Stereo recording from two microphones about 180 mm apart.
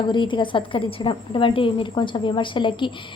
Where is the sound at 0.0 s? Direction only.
25° left (ahead or behind).